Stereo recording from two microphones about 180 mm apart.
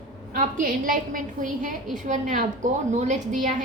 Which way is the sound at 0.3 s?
50° right (ahead or behind).